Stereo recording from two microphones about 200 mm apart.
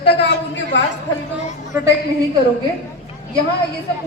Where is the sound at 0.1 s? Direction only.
65° left (ahead or behind).